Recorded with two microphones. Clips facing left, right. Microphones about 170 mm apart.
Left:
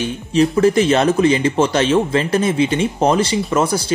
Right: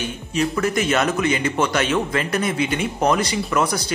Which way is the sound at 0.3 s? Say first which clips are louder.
Left 8 dB; 30° left (ahead or behind).